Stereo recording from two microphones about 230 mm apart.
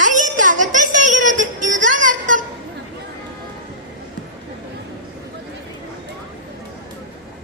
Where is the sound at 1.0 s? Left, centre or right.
Right.